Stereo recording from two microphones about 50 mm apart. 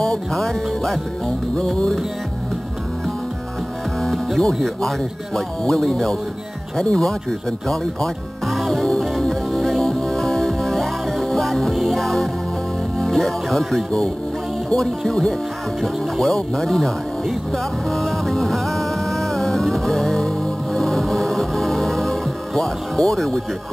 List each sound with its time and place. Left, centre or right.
0.0 s speech: centre
1.7 s music: centre
4.0 s speech: centre
9.2 s music: centre
13.0 s speech: centre
17.8 s music: centre